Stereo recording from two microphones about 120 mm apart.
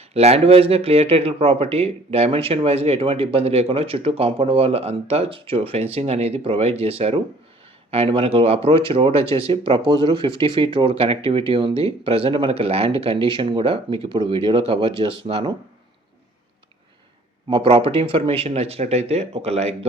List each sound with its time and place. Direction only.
0.1 s speech: 60° right (ahead or behind)
17.5 s speech: 45° right (ahead or behind); by 19.7 s 60° right (ahead or behind)